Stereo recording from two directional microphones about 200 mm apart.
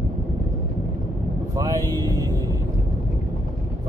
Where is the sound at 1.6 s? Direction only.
15° right (ahead or behind).